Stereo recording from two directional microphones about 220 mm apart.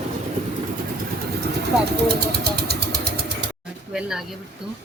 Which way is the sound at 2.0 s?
45° right (ahead or behind).